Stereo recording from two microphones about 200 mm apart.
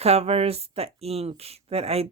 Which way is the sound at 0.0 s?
30° right (ahead or behind).